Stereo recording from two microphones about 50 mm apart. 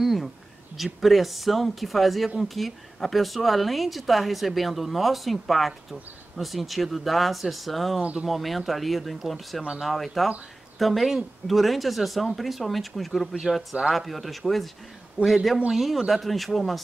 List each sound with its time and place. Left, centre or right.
0.0 s a sound: centre
1.0 s speech: centre
8.0 s speech: right
8.3 s speech: centre